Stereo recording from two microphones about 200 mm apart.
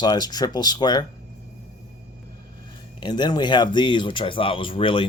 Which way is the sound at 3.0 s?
20° left (ahead or behind).